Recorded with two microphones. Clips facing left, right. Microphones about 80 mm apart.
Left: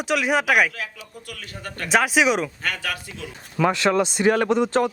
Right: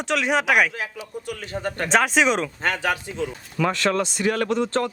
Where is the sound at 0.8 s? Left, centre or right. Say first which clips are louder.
Right 4 dB; right.